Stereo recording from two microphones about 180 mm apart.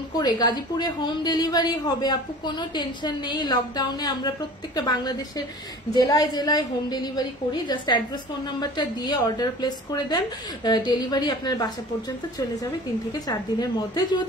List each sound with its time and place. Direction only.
0.1 s a woman's voice: 25° left (ahead or behind)
13.3 s a woman's voice: 20° left (ahead or behind)